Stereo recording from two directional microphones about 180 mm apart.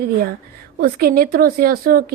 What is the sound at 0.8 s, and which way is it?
A woman's voice, 55° right (ahead or behind).